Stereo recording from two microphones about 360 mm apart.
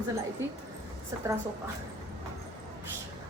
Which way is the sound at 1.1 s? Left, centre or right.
Centre.